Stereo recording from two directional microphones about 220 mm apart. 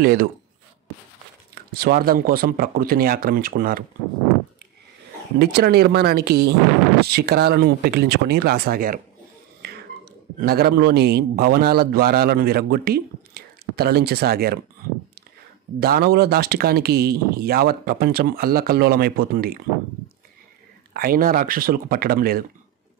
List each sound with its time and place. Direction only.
0.0 s speech: 40° right (ahead or behind)
1.5 s speech: 45° right (ahead or behind)
5.4 s speech: 45° right (ahead or behind)
15.8 s speech: 45° right (ahead or behind)
20.9 s speech: 45° right (ahead or behind)